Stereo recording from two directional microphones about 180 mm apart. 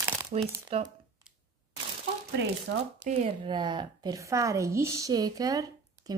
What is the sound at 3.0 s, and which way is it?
Speech, 40° right (ahead or behind).